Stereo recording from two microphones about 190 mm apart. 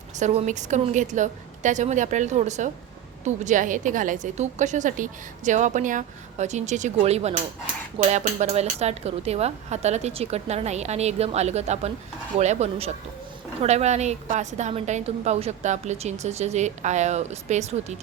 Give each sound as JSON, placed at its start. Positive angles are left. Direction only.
{"t": 0.2, "sound": "a woman's voice", "side_deg": -35}